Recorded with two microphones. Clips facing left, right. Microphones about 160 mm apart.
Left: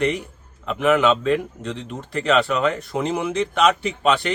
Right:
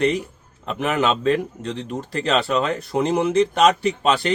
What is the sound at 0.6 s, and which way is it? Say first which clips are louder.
A man's voice: left 3 dB; 35° right (ahead or behind).